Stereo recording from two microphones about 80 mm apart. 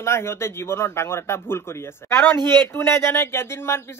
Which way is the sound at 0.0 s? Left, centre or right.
Left.